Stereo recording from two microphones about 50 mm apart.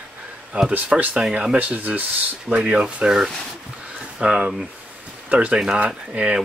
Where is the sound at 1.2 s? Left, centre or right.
Centre.